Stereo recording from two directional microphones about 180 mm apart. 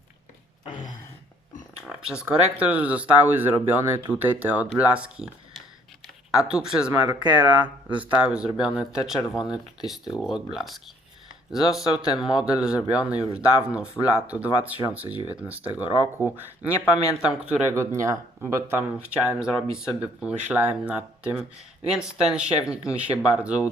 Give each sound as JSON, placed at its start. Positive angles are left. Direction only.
{"t": 1.9, "sound": "speech", "side_deg": -5}
{"t": 6.4, "sound": "speech", "side_deg": -5}
{"t": 15.7, "sound": "speech", "side_deg": 25}
{"t": 16.2, "sound": "speech", "side_deg": -10}